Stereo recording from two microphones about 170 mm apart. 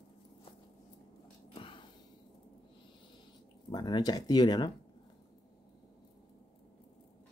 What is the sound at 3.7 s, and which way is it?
Speech, 25° left (ahead or behind).